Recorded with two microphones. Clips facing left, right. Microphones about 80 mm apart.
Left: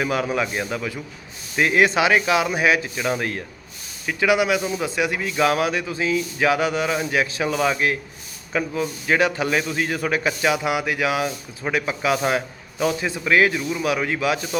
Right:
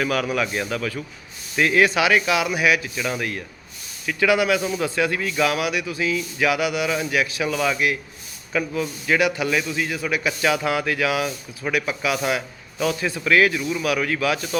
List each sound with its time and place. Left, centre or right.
0.0 s a man's voice: left
10.2 s speech: left